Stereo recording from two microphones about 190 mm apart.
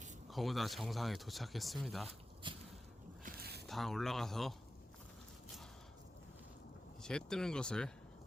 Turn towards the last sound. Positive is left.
turn(degrees=5)  # may be behind; listen again after turning